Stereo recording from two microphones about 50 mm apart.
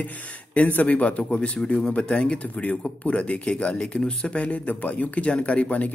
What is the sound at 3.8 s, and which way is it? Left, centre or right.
Speech, centre.